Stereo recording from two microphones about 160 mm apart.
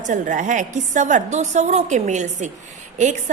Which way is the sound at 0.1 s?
50° right (ahead or behind).